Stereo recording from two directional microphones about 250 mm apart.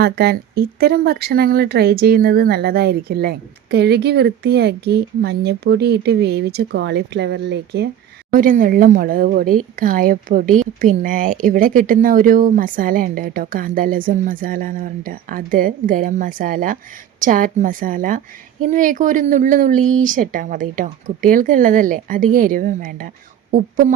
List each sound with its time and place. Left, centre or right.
0.0 s speech: right